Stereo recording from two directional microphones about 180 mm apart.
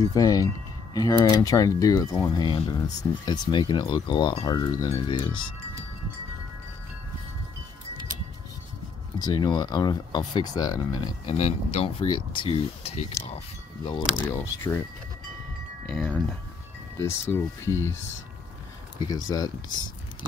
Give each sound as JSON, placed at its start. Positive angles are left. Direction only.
{"t": 0.1, "sound": "speech", "side_deg": 20}
{"t": 9.2, "sound": "speech", "side_deg": 25}
{"t": 13.8, "sound": "speech", "side_deg": 20}
{"t": 15.9, "sound": "wind chime", "side_deg": 5}
{"t": 17.3, "sound": "speech", "side_deg": 15}
{"t": 19.2, "sound": "speech", "side_deg": 20}